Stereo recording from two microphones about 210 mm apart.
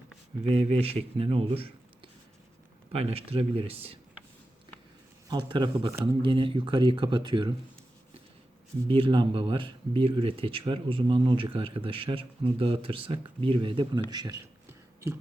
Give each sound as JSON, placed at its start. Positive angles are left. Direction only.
{"t": 0.4, "sound": "speech", "side_deg": -30}
{"t": 2.9, "sound": "speech", "side_deg": -30}
{"t": 5.3, "sound": "speech", "side_deg": -20}
{"t": 8.9, "sound": "speech", "side_deg": -25}